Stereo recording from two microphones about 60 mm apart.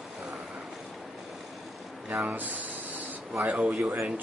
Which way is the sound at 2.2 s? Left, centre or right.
Right.